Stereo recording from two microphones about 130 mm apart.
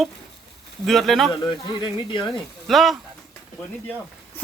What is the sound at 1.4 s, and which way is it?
Speech, 35° left (ahead or behind).